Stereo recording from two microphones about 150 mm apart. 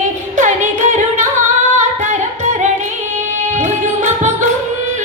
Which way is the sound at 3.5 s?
55° right (ahead or behind).